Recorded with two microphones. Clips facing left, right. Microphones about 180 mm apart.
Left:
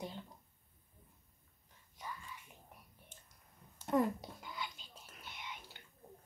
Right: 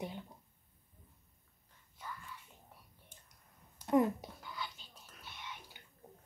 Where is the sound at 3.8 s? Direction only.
20° right (ahead or behind).